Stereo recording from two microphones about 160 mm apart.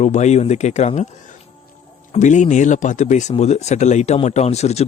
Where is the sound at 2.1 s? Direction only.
50° left (ahead or behind).